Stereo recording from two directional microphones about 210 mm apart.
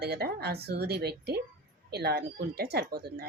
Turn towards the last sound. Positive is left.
turn(degrees=-50)  # may be behind; listen again after turning